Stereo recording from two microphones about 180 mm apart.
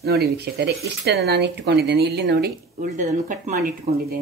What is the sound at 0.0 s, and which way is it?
Speech, 60° right (ahead or behind).